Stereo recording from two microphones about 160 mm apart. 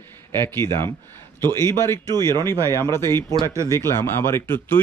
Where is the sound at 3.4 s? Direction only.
20° right (ahead or behind).